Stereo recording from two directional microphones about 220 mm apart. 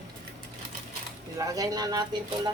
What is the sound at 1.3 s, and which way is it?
Speech, 15° right (ahead or behind).